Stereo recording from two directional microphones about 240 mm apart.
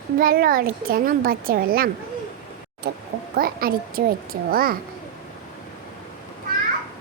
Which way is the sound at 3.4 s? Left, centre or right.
Right.